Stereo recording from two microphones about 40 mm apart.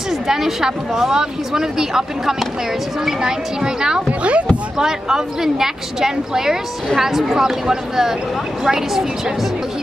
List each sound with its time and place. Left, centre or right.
0.3 s a woman's voice: centre
4.2 s speech: right
4.7 s a woman's voice: centre